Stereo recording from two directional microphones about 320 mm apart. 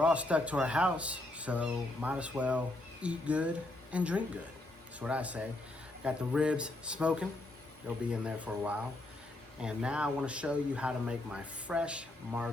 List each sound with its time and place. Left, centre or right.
0.0 s speech: centre